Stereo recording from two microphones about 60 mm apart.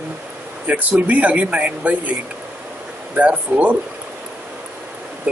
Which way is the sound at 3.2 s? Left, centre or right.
Right.